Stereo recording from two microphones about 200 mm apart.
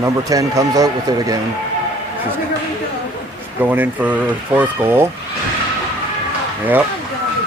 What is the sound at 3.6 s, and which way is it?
Speech, 10° right (ahead or behind).